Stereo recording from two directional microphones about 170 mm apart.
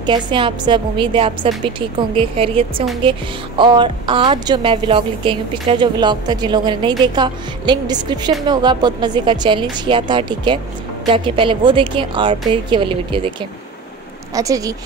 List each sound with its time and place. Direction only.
0.0 s a woman's voice: 25° right (ahead or behind)
14.3 s a woman's voice: 20° right (ahead or behind)